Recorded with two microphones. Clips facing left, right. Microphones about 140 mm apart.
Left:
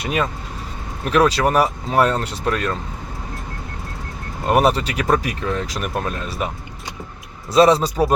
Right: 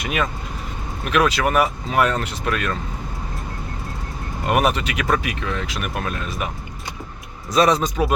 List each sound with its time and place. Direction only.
0.0 s speech: 30° left (ahead or behind)
4.4 s speech: 30° left (ahead or behind)
7.5 s speech: 30° left (ahead or behind)